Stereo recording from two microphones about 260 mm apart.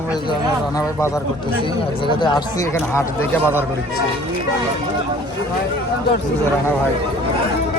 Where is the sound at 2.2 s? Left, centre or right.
Centre.